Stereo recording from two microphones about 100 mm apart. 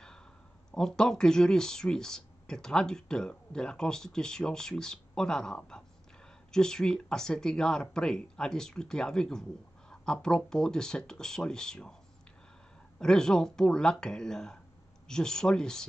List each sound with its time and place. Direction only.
0.7 s speech: 5° left (ahead or behind)
13.0 s speech: 5° left (ahead or behind)